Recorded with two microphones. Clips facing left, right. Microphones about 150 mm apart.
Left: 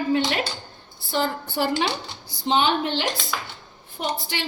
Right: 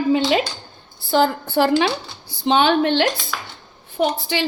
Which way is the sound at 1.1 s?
90° right.